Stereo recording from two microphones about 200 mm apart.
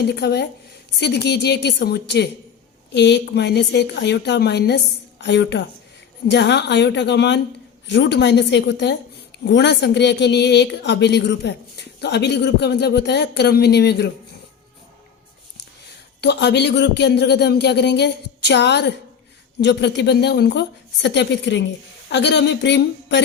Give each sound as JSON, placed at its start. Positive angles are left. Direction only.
{"t": 0.1, "sound": "a woman's voice", "side_deg": 55}
{"t": 16.2, "sound": "a woman's voice", "side_deg": 55}